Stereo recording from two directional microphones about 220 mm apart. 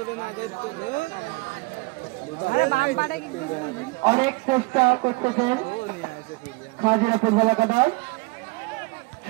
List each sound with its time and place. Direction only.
2.5 s speech: 40° left (ahead or behind)
4.0 s a man's voice: 25° right (ahead or behind)
6.8 s a man's voice: 25° right (ahead or behind)